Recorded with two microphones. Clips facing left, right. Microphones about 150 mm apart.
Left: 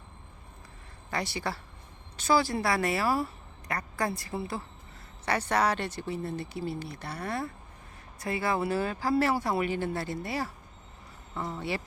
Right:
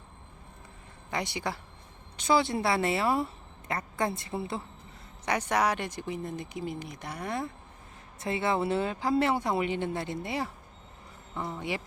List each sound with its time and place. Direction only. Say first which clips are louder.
1.1 s speech: even; 20° right (ahead or behind)
5.2 s speech: even; 15° right (ahead or behind)